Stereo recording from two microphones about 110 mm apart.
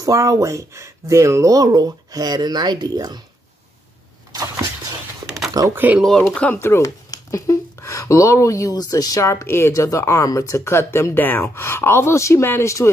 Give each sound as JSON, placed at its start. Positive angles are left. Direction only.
{"t": 0.0, "sound": "speech", "side_deg": -30}
{"t": 5.6, "sound": "speech", "side_deg": -35}
{"t": 5.9, "sound": "speech", "side_deg": 5}
{"t": 6.6, "sound": "speech", "side_deg": 25}